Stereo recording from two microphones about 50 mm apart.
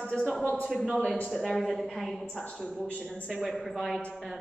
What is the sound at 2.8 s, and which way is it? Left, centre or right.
Speech, left.